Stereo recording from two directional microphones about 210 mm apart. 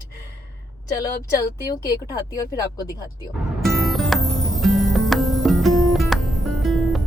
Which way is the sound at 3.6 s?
Centre (ahead or behind).